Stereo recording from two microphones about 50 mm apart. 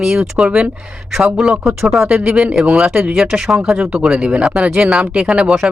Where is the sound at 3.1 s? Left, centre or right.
Centre.